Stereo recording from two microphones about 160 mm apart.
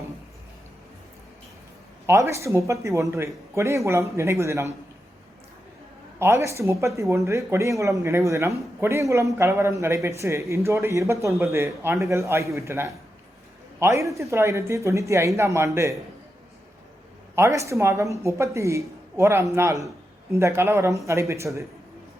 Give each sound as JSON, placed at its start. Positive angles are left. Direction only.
{"t": 2.0, "sound": "speech", "side_deg": -15}
{"t": 6.1, "sound": "speech", "side_deg": -15}
{"t": 17.3, "sound": "speech", "side_deg": -20}